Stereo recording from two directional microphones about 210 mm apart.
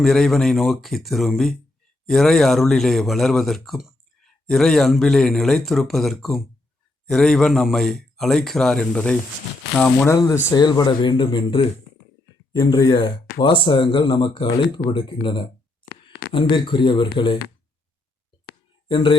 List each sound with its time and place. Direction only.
0.0 s speech: centre (ahead or behind)
10.5 s speech: 20° left (ahead or behind)
18.9 s speech: 25° left (ahead or behind)